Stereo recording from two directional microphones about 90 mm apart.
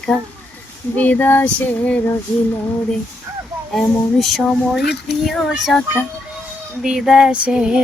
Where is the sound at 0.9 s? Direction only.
20° left (ahead or behind).